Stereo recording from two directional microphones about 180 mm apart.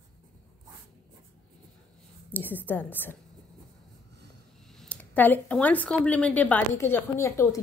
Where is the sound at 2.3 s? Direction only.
10° left (ahead or behind).